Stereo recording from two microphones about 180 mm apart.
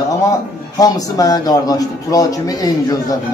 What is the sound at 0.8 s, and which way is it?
A man's voice, 20° left (ahead or behind).